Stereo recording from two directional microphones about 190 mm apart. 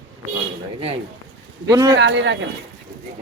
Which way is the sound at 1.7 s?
15° right (ahead or behind).